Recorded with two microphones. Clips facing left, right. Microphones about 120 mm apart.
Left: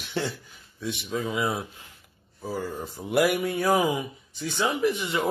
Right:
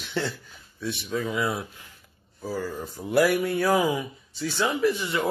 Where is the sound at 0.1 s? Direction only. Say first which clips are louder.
Even; 15° left (ahead or behind).